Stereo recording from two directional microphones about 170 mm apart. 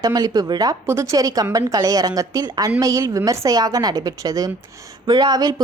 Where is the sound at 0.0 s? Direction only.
20° right (ahead or behind).